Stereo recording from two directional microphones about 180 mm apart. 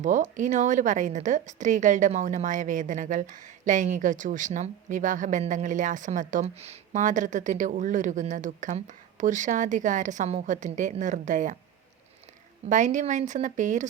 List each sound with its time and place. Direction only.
0.0 s a woman's voice: 45° right (ahead or behind)
12.6 s a woman's voice: 45° right (ahead or behind)